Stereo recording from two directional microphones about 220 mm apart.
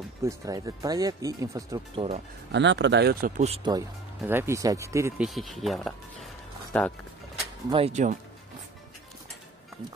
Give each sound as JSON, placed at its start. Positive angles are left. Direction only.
{"t": 0.2, "sound": "speech", "side_deg": -15}
{"t": 2.5, "sound": "speech", "side_deg": -55}
{"t": 3.4, "sound": "speech", "side_deg": -25}
{"t": 4.2, "sound": "speech", "side_deg": -10}
{"t": 5.2, "sound": "speech", "side_deg": 0}
{"t": 7.7, "sound": "speech", "side_deg": -30}